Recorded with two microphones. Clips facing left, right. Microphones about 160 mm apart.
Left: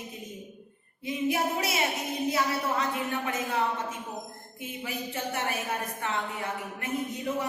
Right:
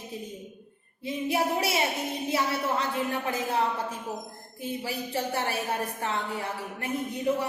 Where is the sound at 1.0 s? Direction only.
30° right (ahead or behind).